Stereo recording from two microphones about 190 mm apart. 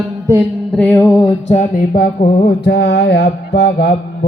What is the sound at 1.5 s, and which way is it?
Mantra, 40° left (ahead or behind).